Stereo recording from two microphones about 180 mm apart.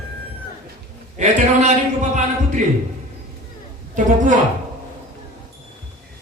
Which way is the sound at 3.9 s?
45° right (ahead or behind).